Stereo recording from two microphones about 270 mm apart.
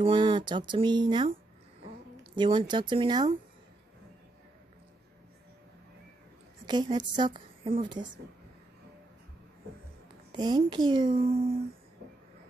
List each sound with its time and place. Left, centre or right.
0.0 s a woman's voice: centre
2.3 s a woman's voice: centre
6.6 s a woman's voice: centre
10.3 s a woman's voice: centre